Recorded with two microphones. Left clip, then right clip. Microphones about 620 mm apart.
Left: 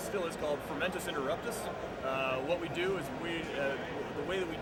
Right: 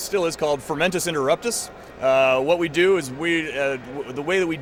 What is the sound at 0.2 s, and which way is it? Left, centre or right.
Speech, right.